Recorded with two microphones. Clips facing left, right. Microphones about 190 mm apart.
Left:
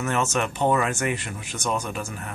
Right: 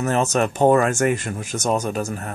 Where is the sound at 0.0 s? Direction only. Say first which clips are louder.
Right 5 dB; 35° right (ahead or behind).